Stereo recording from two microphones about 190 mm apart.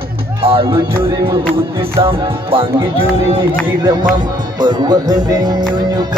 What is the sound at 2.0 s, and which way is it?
Speech, 30° right (ahead or behind).